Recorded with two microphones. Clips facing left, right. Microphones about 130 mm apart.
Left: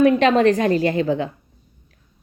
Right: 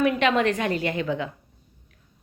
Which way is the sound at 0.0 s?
35° left (ahead or behind).